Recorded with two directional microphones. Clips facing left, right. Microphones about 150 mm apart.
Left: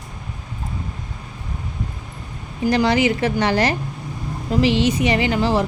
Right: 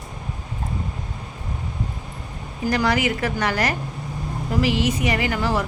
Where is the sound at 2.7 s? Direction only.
25° left (ahead or behind).